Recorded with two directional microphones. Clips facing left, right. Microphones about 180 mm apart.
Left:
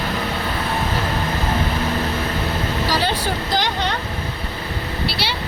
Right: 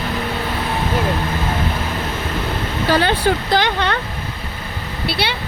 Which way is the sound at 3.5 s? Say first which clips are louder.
Right 4 dB; 60° right (ahead or behind).